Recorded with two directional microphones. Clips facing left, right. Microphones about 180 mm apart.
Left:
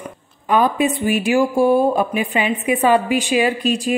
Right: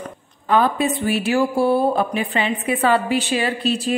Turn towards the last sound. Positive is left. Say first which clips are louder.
# left 3 dB
turn(degrees=15)  # may be behind; listen again after turning